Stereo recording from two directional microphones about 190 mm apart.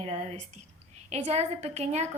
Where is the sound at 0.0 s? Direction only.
30° right (ahead or behind).